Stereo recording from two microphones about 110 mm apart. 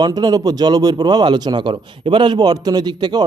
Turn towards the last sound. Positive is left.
turn(degrees=-40)  # may be behind; listen again after turning